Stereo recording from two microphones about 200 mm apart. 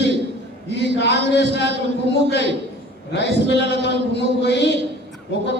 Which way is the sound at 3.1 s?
60° left (ahead or behind).